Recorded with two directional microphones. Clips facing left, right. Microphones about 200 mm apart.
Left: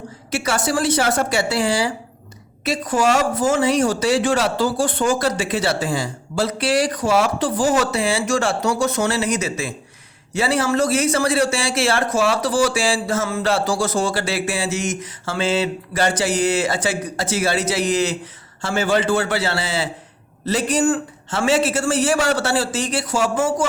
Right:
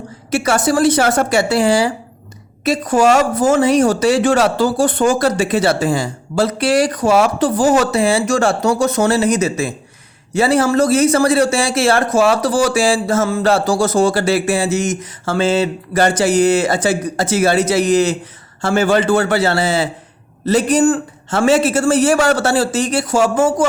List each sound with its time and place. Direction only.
0.3 s a man's voice: 45° right (ahead or behind)